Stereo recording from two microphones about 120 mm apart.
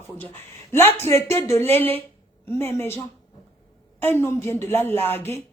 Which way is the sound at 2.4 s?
20° left (ahead or behind).